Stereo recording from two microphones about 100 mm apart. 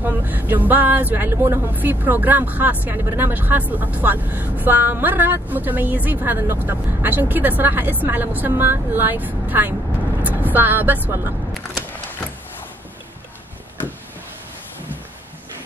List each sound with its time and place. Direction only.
0.0 s speech: 15° right (ahead or behind)